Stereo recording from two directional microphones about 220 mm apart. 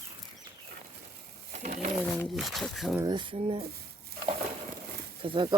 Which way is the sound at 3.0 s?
20° right (ahead or behind).